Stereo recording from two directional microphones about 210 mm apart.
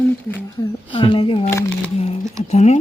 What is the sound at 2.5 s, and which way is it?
Speech, 30° left (ahead or behind).